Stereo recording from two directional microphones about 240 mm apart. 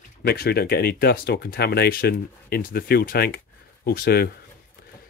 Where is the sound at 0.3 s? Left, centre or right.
Left.